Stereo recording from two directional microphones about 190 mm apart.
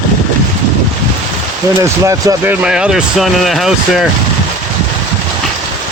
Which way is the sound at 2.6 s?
5° right (ahead or behind).